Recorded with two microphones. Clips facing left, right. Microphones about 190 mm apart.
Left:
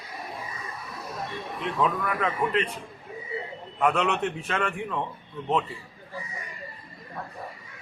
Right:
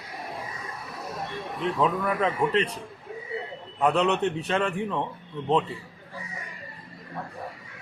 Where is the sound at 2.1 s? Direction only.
30° right (ahead or behind).